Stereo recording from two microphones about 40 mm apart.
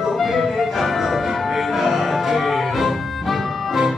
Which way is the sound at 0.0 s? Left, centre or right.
Centre.